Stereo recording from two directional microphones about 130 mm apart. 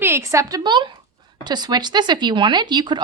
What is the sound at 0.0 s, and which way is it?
A woman's voice, 20° right (ahead or behind).